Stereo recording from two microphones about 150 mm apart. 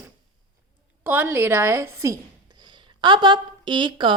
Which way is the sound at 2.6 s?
30° right (ahead or behind).